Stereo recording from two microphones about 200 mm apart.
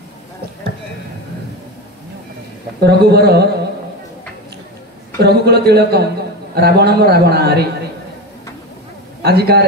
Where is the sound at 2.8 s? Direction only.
55° right (ahead or behind).